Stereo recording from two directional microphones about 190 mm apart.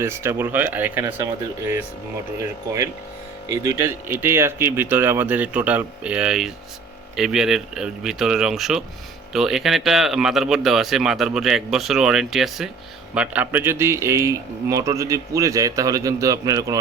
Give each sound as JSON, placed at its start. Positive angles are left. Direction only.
{"t": 0.0, "sound": "a man's voice", "side_deg": -15}